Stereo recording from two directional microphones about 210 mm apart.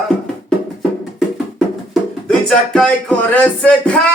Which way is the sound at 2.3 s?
5° left (ahead or behind).